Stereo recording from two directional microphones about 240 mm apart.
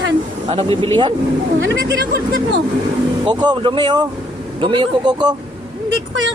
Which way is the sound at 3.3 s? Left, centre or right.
Centre.